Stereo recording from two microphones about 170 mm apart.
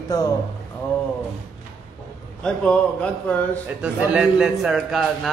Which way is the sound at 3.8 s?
5° right (ahead or behind).